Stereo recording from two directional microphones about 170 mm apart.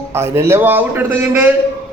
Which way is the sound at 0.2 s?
15° right (ahead or behind).